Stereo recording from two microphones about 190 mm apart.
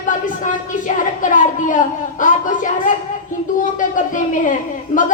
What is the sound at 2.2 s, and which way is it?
Speech, 45° left (ahead or behind).